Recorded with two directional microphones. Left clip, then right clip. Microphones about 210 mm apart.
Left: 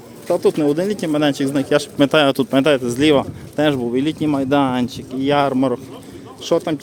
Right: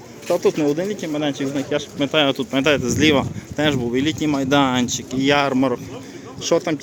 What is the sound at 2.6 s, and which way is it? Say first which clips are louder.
Speech: even; 15° left (ahead or behind).